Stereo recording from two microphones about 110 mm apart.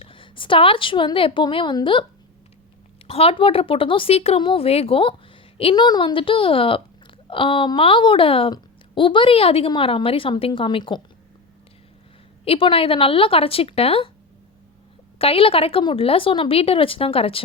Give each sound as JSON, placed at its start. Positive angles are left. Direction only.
{"t": 0.0, "sound": "a woman's voice", "side_deg": 50}
{"t": 3.1, "sound": "a woman's voice", "side_deg": 60}
{"t": 5.7, "sound": "a woman's voice", "side_deg": 40}
{"t": 12.5, "sound": "a woman's voice", "side_deg": 55}
{"t": 15.2, "sound": "a woman's voice", "side_deg": 60}